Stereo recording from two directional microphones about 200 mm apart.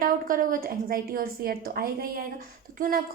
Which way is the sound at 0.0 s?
45° right (ahead or behind).